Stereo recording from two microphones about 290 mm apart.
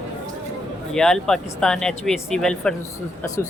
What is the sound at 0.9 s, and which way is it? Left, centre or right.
Speech, centre.